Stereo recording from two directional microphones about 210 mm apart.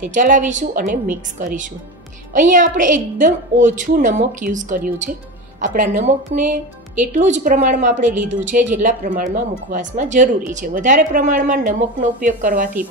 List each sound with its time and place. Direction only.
0.0 s speech: 40° right (ahead or behind)